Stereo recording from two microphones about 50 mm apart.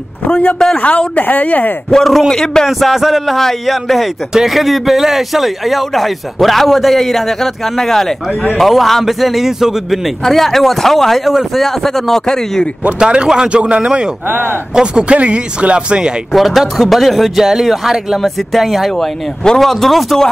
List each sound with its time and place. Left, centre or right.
0.3 s a man's voice: left
1.9 s speech: centre
2.8 s speech: centre
10.2 s speech: centre
13.0 s speech: centre
16.3 s speech: centre
19.4 s speech: centre